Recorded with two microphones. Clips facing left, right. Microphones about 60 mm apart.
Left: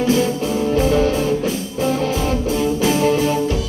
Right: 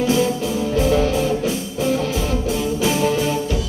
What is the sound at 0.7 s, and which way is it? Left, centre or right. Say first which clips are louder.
Music: left 1 dB; left.